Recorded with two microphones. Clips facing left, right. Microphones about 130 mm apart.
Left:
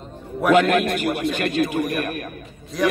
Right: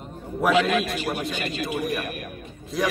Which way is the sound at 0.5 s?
55° left (ahead or behind).